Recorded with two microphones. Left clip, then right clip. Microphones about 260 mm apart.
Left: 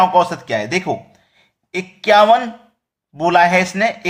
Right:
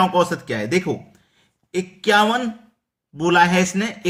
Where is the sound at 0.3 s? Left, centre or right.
Centre.